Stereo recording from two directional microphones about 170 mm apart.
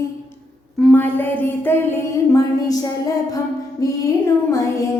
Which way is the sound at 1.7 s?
15° left (ahead or behind).